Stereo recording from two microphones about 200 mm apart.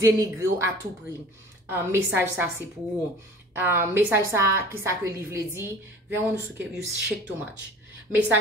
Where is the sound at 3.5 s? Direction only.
10° right (ahead or behind).